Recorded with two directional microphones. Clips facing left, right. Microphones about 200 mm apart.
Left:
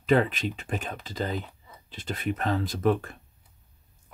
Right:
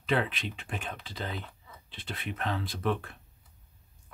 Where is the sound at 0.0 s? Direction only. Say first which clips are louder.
Left 7 dB; 45° left (ahead or behind).